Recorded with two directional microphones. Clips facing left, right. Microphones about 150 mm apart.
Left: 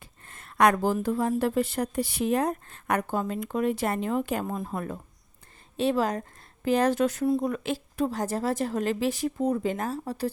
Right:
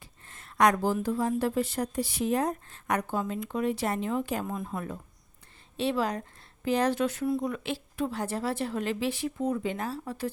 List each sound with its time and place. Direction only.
0.3 s speech: 55° left (ahead or behind)
4.5 s a woman's voice: 35° left (ahead or behind)